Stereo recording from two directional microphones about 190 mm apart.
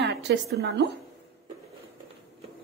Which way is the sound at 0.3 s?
60° right (ahead or behind).